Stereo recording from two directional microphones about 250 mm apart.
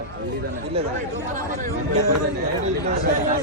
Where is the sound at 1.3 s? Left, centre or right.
Right.